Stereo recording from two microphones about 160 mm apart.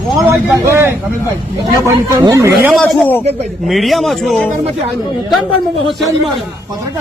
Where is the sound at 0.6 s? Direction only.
15° right (ahead or behind).